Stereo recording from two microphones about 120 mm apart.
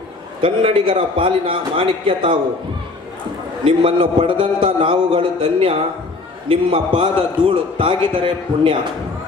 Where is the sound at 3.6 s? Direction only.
45° right (ahead or behind).